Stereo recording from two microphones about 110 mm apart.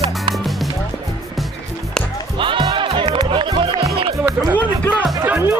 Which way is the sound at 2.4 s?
50° right (ahead or behind).